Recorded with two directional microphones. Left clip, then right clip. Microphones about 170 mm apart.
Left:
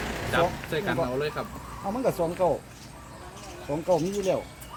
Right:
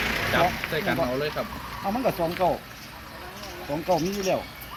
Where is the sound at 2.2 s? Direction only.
75° left (ahead or behind).